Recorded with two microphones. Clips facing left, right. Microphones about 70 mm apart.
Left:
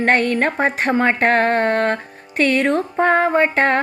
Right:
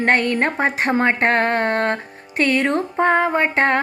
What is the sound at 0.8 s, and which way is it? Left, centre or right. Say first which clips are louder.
Music: left 1 dB; right.